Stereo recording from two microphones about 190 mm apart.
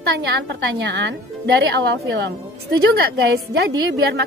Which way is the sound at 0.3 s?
65° right (ahead or behind).